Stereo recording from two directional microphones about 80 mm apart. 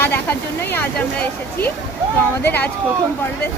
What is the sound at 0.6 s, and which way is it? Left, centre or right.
Speech, left.